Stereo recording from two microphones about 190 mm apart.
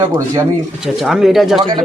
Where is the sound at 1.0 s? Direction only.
Centre (ahead or behind).